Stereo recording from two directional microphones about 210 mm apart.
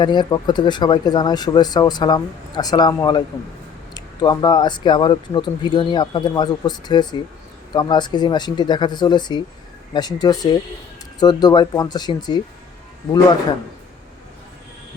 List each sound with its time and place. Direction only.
0.0 s speech: 20° left (ahead or behind)